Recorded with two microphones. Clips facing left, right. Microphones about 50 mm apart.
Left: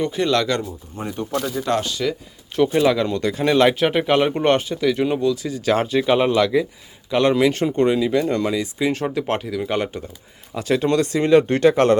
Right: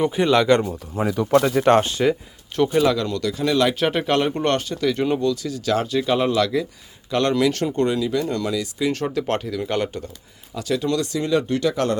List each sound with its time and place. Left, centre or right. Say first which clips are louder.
0.0 s speech: right 2 dB; centre
1.5 s speech: right 5 dB; right
1.8 s speech: right 4 dB; right
2.7 s speech: left 1 dB; centre
3.8 s speech: left 3 dB; centre
5.5 s speech: left 2 dB; left; by 10.0 s centre
10.5 s speech: left 3 dB; left